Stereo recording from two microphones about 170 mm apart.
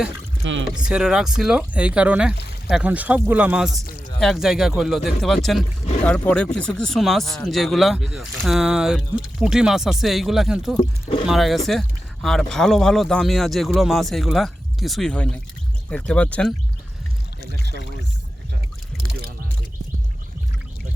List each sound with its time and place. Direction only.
0.4 s speech: 90° right
0.9 s speech: 5° right (ahead or behind)